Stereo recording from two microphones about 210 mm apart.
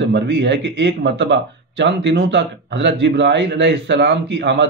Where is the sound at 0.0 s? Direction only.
55° right (ahead or behind).